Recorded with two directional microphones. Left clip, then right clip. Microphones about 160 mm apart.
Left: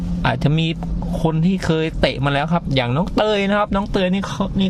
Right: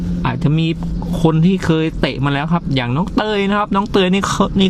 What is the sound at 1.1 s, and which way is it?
Speech, 10° right (ahead or behind).